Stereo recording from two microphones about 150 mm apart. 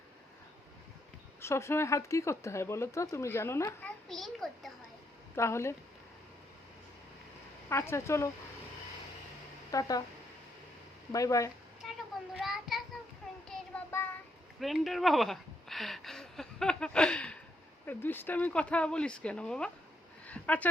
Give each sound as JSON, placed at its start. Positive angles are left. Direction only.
{"t": 1.4, "sound": "speech", "side_deg": 20}
{"t": 5.4, "sound": "speech", "side_deg": 20}
{"t": 7.7, "sound": "speech", "side_deg": 20}
{"t": 9.7, "sound": "speech", "side_deg": 25}
{"t": 11.1, "sound": "speech", "side_deg": 20}
{"t": 11.8, "sound": "a sound", "side_deg": 0}
{"t": 12.3, "sound": "child singing", "side_deg": -5}
{"t": 13.9, "sound": "child singing", "side_deg": 15}
{"t": 14.6, "sound": "a sound", "side_deg": 0}
{"t": 17.8, "sound": "speech", "side_deg": 15}
{"t": 20.2, "sound": "a sound", "side_deg": 10}